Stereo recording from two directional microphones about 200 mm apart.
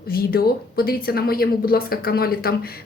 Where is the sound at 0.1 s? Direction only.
50° left (ahead or behind).